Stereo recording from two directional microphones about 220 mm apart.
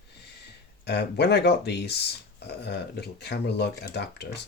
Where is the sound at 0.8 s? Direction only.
50° left (ahead or behind).